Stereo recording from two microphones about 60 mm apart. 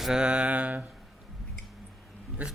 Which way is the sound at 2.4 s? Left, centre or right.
Right.